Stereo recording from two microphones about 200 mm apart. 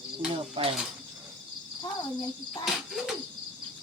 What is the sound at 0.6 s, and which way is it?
Speech, 25° right (ahead or behind).